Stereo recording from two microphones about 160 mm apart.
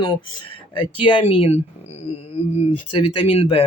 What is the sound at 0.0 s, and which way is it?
Speech, 30° left (ahead or behind).